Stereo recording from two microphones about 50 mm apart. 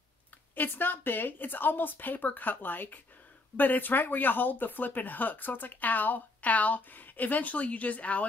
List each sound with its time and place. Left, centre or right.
0.6 s speech: left